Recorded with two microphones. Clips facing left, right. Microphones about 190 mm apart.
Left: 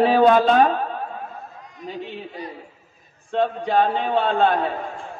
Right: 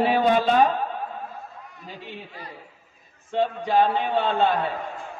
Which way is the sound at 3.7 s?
55° left (ahead or behind).